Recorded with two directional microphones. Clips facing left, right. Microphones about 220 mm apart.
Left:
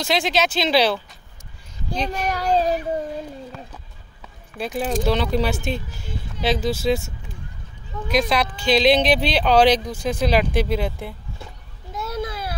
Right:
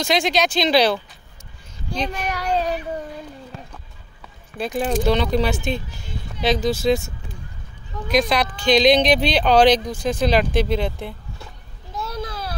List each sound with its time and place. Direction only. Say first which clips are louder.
0.0 s speech: right 1 dB; 5° left (ahead or behind)
2.0 s speech: left 4 dB; 35° left (ahead or behind)
4.6 s speech: right 2 dB; 5° left (ahead or behind)
8.1 s speech: right 1 dB; 5° left (ahead or behind)
11.9 s a sound: left 2 dB; 25° left (ahead or behind)